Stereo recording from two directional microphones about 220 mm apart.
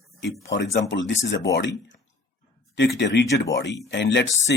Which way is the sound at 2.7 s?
55° left (ahead or behind).